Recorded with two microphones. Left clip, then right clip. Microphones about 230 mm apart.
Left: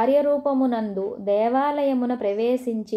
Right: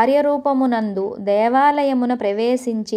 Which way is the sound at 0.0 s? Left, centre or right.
Right.